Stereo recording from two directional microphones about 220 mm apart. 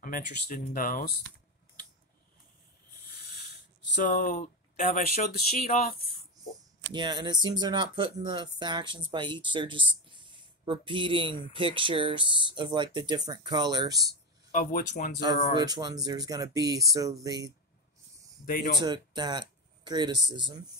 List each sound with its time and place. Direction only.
0.0 s speech: 40° left (ahead or behind)
3.9 s speech: 40° left (ahead or behind)
6.9 s speech: 20° right (ahead or behind)
14.5 s speech: 35° left (ahead or behind)
15.5 s speech: 20° right (ahead or behind)
18.4 s speech: 40° left (ahead or behind)
18.8 s speech: 20° right (ahead or behind)